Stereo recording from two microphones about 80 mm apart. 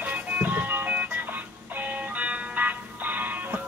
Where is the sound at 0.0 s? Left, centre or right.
Right.